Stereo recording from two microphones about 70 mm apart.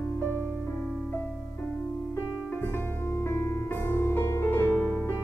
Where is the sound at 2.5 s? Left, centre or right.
Left.